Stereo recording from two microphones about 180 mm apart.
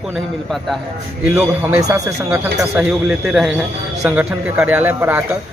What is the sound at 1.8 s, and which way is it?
Speech, 20° right (ahead or behind).